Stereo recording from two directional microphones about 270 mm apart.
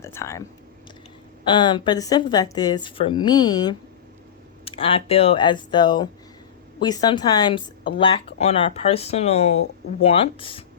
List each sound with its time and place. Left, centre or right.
0.0 s speech: centre
1.5 s a woman's voice: centre